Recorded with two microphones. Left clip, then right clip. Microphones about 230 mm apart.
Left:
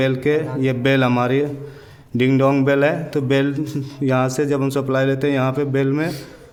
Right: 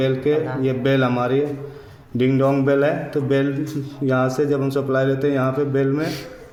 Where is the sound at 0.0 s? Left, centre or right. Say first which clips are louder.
Left 1 dB; left.